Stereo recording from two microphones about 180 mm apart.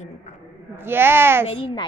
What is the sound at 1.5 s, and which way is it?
Speech, 30° left (ahead or behind).